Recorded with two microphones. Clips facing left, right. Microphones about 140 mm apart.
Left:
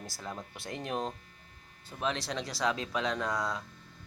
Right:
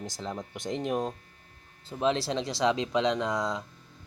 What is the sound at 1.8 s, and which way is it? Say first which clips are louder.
Speech: right 7 dB; 30° right (ahead or behind).